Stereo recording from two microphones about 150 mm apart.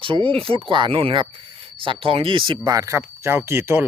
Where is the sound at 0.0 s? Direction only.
35° right (ahead or behind).